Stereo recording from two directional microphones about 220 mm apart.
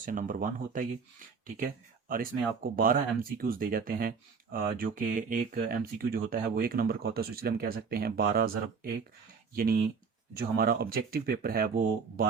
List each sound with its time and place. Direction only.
0.0 s speech: 35° right (ahead or behind)
2.0 s speech: 40° right (ahead or behind)